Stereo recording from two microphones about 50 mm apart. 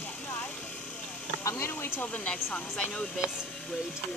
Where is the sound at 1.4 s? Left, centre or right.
Left.